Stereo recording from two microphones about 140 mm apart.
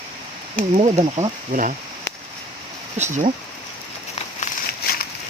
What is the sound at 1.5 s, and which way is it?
Speech, 70° right (ahead or behind).